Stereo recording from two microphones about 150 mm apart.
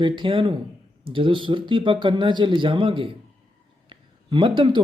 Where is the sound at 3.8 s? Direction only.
35° right (ahead or behind).